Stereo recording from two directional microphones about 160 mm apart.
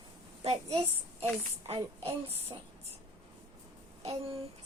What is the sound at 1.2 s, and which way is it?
A child's voice, 40° right (ahead or behind).